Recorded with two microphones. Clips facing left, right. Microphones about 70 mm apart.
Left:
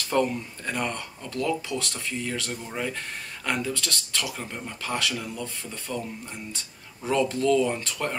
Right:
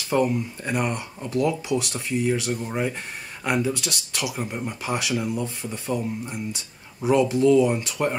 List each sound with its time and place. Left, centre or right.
0.1 s speech: centre